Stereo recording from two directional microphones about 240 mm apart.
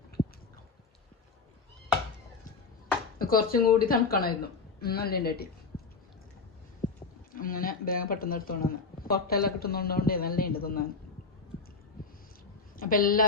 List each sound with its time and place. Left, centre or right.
3.2 s a woman's voice: left
7.3 s speech: left
12.7 s a woman's voice: left